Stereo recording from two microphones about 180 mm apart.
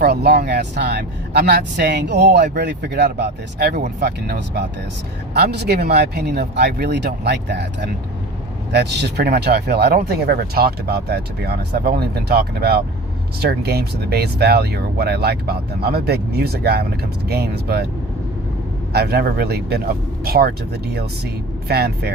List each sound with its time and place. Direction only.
0.0 s speech: 65° right (ahead or behind)
18.9 s speech: 65° right (ahead or behind)
21.7 s speech: 60° right (ahead or behind)